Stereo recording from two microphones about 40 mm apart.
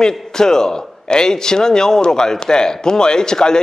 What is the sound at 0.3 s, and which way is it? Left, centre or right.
A man's voice, centre.